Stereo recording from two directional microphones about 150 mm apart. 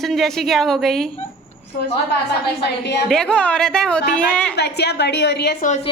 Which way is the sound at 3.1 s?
5° left (ahead or behind).